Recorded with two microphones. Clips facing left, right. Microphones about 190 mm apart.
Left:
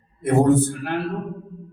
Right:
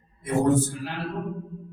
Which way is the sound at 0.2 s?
60° left (ahead or behind).